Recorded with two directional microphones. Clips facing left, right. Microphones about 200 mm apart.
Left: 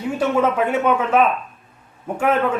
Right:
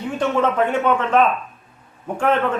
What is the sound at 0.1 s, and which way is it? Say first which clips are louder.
A man's voice: left 1 dB; 10° left (ahead or behind).